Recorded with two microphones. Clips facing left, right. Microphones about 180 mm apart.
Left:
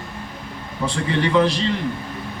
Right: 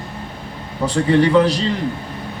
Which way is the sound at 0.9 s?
35° right (ahead or behind).